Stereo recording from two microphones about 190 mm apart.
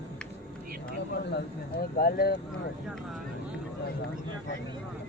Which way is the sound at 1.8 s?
55° left (ahead or behind).